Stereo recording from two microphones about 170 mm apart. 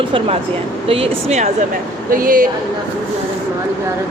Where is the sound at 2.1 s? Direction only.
55° right (ahead or behind).